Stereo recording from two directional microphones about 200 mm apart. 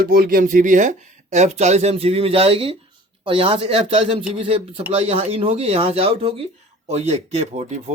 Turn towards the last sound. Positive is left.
turn(degrees=-35)  # may be behind; listen again after turning